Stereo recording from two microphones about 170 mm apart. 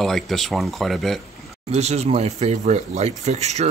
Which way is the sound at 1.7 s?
40° right (ahead or behind).